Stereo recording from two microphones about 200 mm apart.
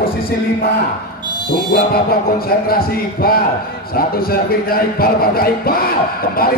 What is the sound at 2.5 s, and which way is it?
A man's voice, 50° left (ahead or behind).